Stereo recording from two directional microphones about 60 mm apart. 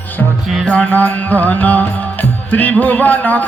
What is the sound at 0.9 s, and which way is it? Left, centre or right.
Music, left.